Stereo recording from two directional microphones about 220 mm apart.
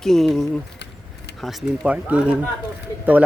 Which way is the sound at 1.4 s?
5° right (ahead or behind).